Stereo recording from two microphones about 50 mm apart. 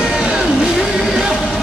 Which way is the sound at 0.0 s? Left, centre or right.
Centre.